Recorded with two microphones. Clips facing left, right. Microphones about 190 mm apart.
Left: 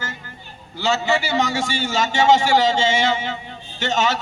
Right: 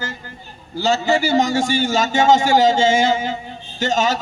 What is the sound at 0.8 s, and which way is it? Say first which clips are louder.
A man's voice: right 3 dB; 40° right (ahead or behind).